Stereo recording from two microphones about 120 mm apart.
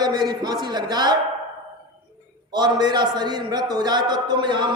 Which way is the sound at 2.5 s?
35° right (ahead or behind).